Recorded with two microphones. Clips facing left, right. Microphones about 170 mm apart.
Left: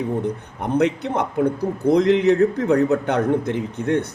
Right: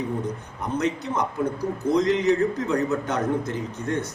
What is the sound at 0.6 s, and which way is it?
A man's voice, 60° left (ahead or behind).